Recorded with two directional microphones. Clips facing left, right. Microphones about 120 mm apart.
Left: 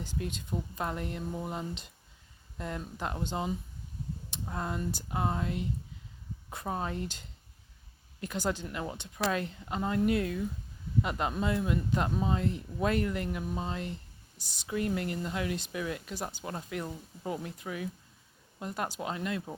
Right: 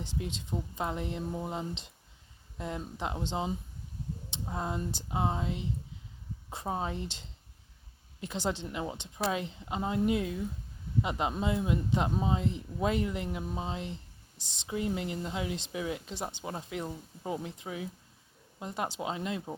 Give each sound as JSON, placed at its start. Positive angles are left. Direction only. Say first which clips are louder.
{"t": 0.0, "sound": "speech", "louder": "even", "side_deg": -25}